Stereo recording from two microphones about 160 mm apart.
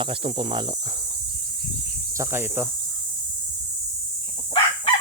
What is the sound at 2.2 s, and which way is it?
Speech, 15° right (ahead or behind).